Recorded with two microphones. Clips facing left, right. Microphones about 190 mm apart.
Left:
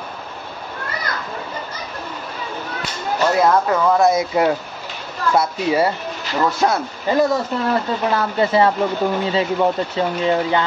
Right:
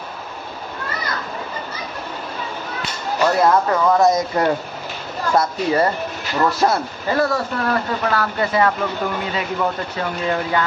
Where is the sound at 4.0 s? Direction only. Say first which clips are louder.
Left 1 dB; 10° left (ahead or behind).